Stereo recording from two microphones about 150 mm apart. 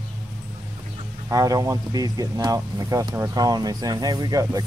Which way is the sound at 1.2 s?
25° right (ahead or behind).